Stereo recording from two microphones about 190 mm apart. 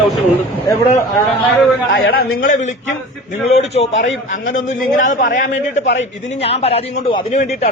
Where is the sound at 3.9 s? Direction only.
80° left.